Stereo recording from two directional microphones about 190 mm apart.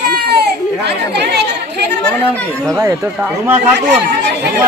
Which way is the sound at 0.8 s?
60° right (ahead or behind).